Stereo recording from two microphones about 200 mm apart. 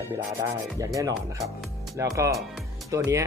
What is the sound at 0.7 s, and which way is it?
Speech, 15° right (ahead or behind).